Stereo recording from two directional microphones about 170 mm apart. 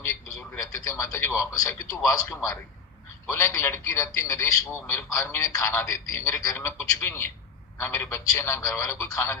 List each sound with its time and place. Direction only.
0.3 s a man's voice: 15° left (ahead or behind)